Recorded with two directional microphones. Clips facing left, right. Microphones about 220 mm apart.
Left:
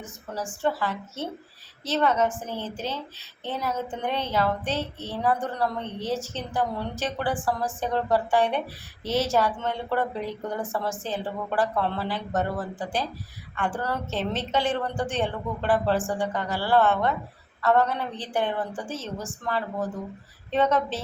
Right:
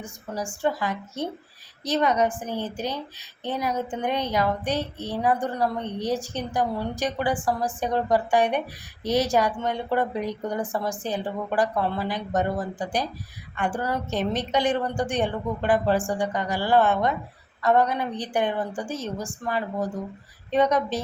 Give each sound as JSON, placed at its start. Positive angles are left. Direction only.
{"t": 0.0, "sound": "a woman's voice", "side_deg": -15}